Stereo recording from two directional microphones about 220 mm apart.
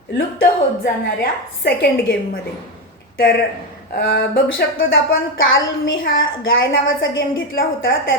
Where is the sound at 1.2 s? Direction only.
45° left (ahead or behind).